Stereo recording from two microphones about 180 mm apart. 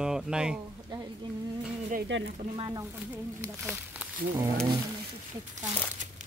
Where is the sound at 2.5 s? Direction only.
30° right (ahead or behind).